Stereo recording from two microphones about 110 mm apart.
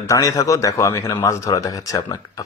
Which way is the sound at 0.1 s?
30° left (ahead or behind).